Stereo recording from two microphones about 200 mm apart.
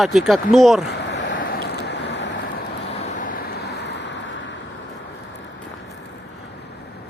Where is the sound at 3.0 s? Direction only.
40° left (ahead or behind); by 4.4 s 65° left (ahead or behind).